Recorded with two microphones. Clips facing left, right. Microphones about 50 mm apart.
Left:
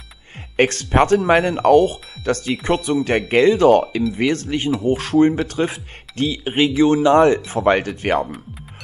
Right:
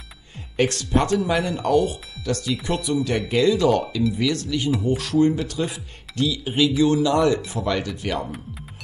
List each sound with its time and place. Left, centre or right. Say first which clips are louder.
0.6 s speech: left 5 dB; left